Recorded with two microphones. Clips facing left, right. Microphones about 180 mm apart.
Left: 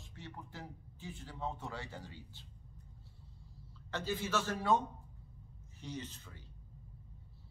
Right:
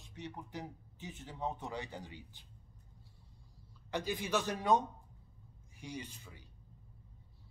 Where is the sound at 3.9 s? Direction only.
15° right (ahead or behind).